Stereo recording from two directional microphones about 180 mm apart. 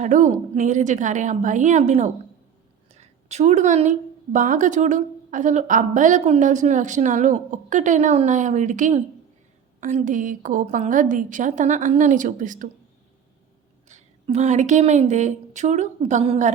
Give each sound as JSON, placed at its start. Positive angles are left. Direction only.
{"t": 0.0, "sound": "a woman's voice", "side_deg": -45}
{"t": 13.8, "sound": "a woman's voice", "side_deg": -40}